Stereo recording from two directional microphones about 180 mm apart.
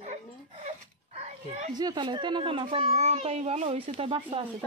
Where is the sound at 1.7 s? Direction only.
25° right (ahead or behind).